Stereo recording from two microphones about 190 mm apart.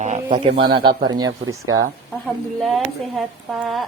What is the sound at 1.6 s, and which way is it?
Speech, 90° right.